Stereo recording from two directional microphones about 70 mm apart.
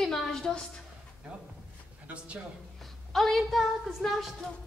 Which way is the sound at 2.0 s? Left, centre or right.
Centre.